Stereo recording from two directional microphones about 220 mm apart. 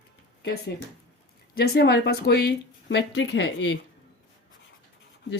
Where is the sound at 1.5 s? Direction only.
45° left (ahead or behind).